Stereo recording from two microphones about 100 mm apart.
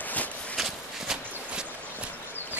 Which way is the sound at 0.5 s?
5° right (ahead or behind).